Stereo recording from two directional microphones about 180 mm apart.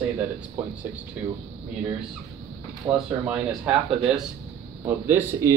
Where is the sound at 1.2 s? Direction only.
10° right (ahead or behind).